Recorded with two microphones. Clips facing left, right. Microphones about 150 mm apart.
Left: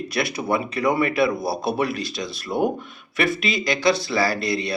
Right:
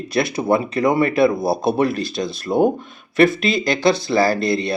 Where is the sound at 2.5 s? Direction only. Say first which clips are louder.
Right 6 dB; 25° right (ahead or behind).